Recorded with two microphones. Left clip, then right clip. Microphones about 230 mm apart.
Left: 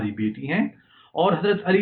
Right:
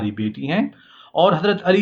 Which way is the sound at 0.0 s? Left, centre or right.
Right.